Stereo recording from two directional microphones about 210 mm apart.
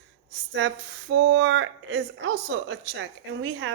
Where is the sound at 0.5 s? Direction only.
55° right (ahead or behind).